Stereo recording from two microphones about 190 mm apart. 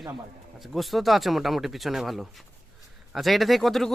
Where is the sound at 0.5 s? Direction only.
Centre (ahead or behind).